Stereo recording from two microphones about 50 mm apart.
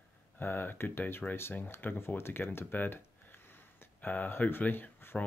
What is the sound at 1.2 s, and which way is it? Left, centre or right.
Speech, centre.